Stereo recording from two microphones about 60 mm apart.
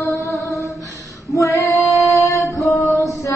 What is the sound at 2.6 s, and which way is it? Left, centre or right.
Music, centre.